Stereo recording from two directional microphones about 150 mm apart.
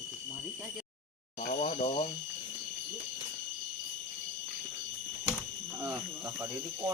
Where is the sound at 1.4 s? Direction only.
55° left (ahead or behind).